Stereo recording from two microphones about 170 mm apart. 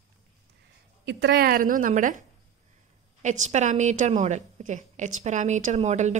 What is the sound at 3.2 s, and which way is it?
A woman's voice, 45° right (ahead or behind).